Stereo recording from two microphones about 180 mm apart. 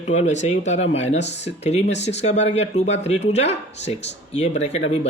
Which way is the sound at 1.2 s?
75° left (ahead or behind).